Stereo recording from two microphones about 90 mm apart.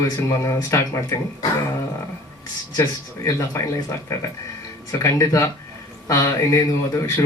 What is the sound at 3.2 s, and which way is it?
Speech, 35° left (ahead or behind).